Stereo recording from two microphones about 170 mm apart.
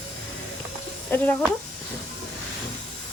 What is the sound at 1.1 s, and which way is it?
Speech, 10° left (ahead or behind).